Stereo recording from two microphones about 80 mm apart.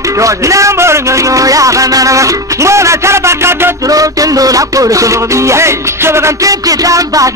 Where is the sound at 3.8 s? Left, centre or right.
Right.